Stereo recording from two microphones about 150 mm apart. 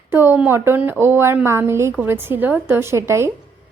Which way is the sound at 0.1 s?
15° right (ahead or behind).